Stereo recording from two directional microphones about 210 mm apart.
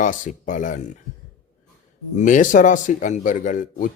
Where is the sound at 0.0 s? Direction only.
40° left (ahead or behind).